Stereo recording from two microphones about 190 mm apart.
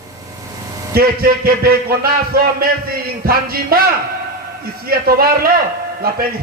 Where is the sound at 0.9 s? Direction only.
50° right (ahead or behind).